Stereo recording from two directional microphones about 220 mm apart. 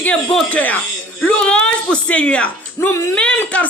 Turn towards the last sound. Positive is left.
turn(degrees=5)  # may be behind; listen again after turning